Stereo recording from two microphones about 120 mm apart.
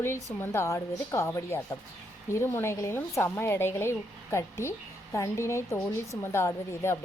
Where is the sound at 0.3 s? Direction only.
20° left (ahead or behind).